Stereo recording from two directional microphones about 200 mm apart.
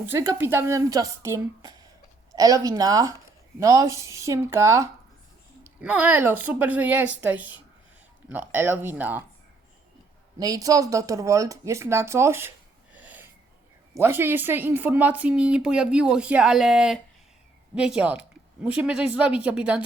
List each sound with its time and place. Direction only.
0.0 s a woman's voice: 10° right (ahead or behind)
10.4 s speech: 15° right (ahead or behind)